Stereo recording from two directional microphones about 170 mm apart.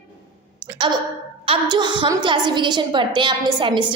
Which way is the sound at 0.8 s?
30° right (ahead or behind).